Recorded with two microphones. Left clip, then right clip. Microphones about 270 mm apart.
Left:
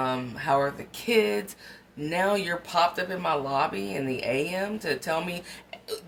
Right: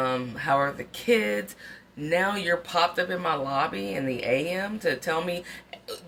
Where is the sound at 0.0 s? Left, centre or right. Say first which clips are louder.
Right 1 dB; centre.